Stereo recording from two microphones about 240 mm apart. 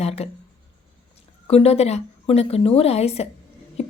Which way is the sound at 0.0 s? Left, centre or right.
Left.